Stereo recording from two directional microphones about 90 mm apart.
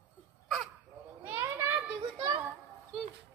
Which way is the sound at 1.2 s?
25° right (ahead or behind).